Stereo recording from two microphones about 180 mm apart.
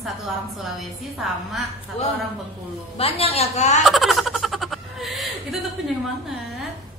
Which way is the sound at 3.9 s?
Centre (ahead or behind).